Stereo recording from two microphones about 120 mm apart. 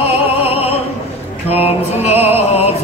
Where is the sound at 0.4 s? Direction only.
55° left (ahead or behind).